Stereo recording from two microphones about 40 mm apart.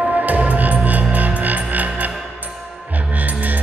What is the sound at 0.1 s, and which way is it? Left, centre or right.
Music, right.